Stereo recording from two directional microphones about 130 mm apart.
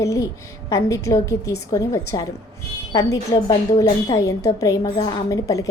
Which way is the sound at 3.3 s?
30° left (ahead or behind).